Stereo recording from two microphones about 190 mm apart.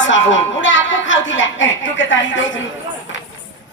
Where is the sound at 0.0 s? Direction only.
80° left.